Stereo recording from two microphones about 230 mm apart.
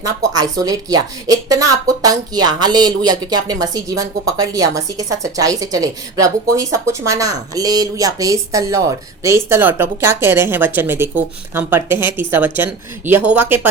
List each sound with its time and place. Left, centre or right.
0.0 s a woman's voice: centre